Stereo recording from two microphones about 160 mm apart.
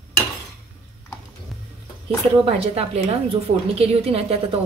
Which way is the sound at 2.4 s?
40° right (ahead or behind).